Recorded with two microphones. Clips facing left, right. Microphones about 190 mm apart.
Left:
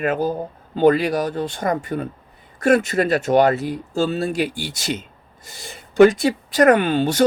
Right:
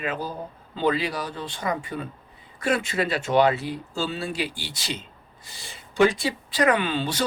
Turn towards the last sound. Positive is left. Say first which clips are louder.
# left 7 dB
turn(degrees=45)  # may be behind; listen again after turning